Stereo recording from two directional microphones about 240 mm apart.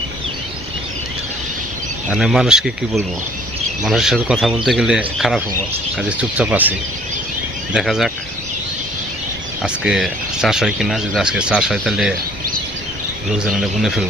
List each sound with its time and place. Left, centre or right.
2.0 s speech: centre
9.6 s speech: centre
13.6 s speech: centre